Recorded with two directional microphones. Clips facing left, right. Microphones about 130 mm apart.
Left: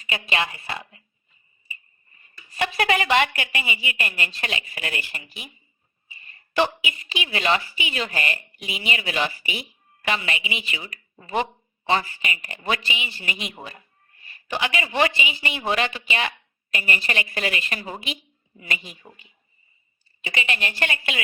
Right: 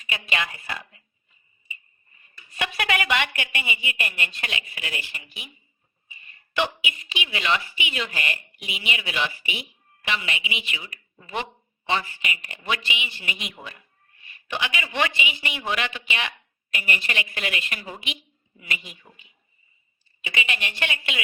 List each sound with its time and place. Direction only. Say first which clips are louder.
0.0 s speech: left 3 dB; 35° left (ahead or behind)
2.6 s a woman's voice: left 4 dB; 35° left (ahead or behind)
4.8 s speech: left 3 dB; 50° left (ahead or behind)
6.6 s a woman's voice: left 4 dB; 40° left (ahead or behind)
20.2 s a woman's voice: left 2 dB; 40° left (ahead or behind)